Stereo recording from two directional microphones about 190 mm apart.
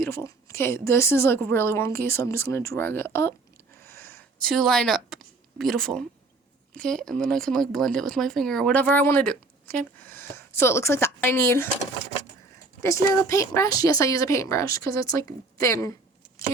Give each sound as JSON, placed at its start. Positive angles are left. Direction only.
{"t": 0.0, "sound": "a woman's voice", "side_deg": 15}
{"t": 3.8, "sound": "a sound", "side_deg": 15}
{"t": 4.4, "sound": "speech", "side_deg": 0}
{"t": 12.8, "sound": "a woman's voice", "side_deg": 15}